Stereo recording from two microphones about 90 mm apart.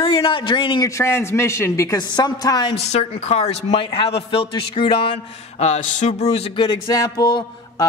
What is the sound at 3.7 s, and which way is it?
A man's voice, 85° left.